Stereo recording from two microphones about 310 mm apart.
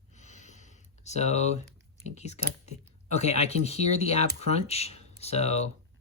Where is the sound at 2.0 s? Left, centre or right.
Left.